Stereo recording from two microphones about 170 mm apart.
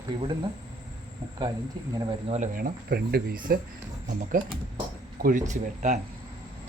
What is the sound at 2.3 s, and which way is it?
Speech, 50° right (ahead or behind).